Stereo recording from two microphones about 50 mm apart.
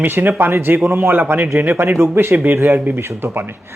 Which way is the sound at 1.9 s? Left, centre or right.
Right.